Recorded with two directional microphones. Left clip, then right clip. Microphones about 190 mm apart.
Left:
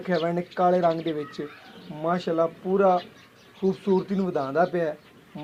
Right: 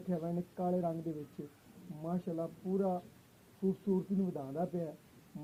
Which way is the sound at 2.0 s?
35° left (ahead or behind).